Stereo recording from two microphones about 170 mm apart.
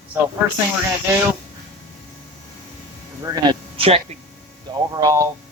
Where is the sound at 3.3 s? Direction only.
25° right (ahead or behind).